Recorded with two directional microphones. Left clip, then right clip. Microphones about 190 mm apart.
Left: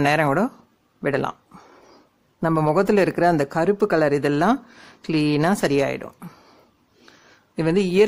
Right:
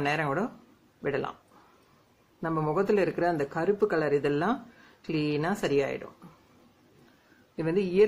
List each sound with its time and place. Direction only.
0.0 s speech: 50° left (ahead or behind)
2.4 s speech: 50° left (ahead or behind)
7.5 s speech: 50° left (ahead or behind)